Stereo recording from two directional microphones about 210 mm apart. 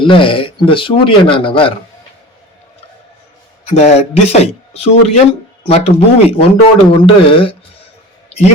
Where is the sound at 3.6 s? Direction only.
30° left (ahead or behind).